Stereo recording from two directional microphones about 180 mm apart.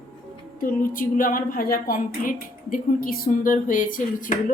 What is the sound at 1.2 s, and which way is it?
Speech, 50° left (ahead or behind).